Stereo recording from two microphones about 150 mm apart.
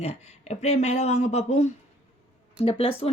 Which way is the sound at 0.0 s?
45° left (ahead or behind).